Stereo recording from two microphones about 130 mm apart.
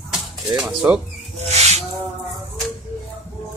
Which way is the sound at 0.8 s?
20° right (ahead or behind).